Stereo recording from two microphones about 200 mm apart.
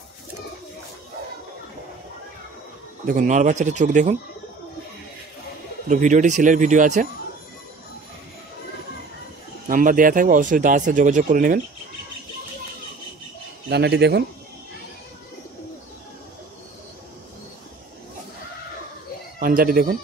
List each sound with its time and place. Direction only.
3.1 s speech: 40° right (ahead or behind)
5.9 s speech: 40° right (ahead or behind)
9.7 s speech: 40° right (ahead or behind)
13.7 s speech: 55° right (ahead or behind)
19.4 s speech: 45° right (ahead or behind)